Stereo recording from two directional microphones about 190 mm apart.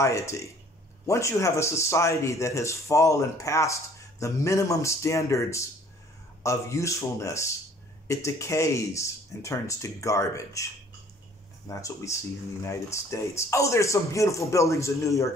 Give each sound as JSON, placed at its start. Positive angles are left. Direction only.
{"t": 0.0, "sound": "speech", "side_deg": 15}